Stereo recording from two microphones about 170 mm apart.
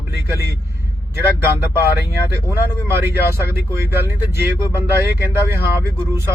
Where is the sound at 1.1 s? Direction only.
15° right (ahead or behind).